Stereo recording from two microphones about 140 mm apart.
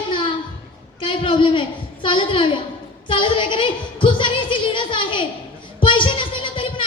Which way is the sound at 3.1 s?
35° left (ahead or behind).